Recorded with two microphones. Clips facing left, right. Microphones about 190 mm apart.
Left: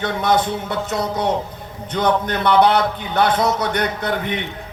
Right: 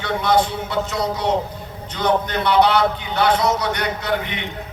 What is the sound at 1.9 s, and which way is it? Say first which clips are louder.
A man's voice: left 1 dB; 50° left (ahead or behind).